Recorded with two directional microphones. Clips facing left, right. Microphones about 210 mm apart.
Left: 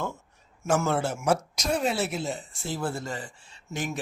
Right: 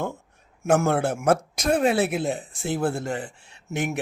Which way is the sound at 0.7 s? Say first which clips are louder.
Right 4 dB; 60° right (ahead or behind).